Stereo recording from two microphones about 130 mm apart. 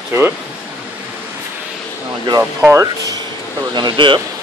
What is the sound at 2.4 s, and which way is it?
Speech, 15° right (ahead or behind).